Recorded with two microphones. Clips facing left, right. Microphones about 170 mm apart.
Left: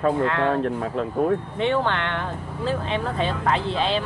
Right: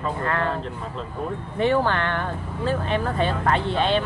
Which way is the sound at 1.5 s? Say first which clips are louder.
Right 2 dB; 5° right (ahead or behind).